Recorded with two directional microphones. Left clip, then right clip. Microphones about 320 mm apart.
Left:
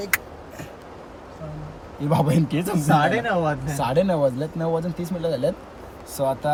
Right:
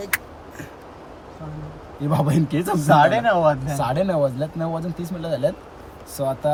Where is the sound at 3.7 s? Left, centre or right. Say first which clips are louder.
Even; centre.